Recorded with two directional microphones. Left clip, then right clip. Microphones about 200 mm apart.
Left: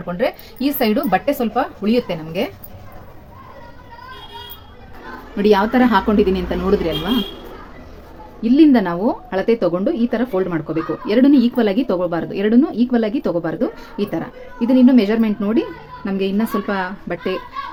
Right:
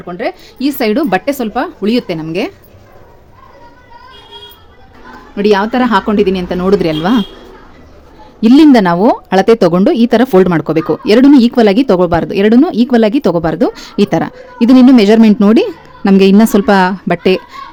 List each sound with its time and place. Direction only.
0.1 s a woman's voice: 45° right (ahead or behind)
5.4 s speech: 25° right (ahead or behind); by 7.2 s 45° right (ahead or behind)
8.4 s a woman's voice: 50° right (ahead or behind)